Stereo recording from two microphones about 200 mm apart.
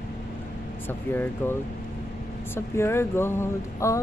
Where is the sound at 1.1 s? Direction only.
10° left (ahead or behind).